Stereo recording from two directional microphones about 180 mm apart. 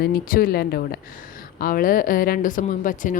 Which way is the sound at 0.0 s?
55° left (ahead or behind).